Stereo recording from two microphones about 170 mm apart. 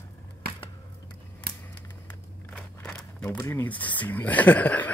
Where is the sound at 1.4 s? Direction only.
65° right (ahead or behind).